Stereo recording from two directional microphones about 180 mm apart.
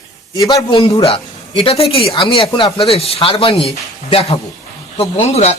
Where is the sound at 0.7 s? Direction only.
30° left (ahead or behind).